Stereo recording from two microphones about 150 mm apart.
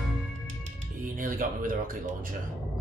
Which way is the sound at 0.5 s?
60° right (ahead or behind).